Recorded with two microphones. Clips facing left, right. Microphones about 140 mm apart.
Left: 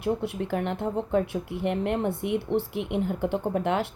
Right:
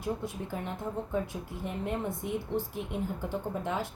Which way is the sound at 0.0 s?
70° left (ahead or behind).